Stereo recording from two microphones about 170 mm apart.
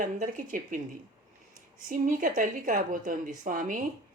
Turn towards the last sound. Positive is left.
turn(degrees=-50)  # may be behind; listen again after turning